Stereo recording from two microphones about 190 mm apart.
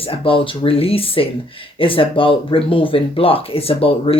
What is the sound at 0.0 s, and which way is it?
Speech, 30° left (ahead or behind).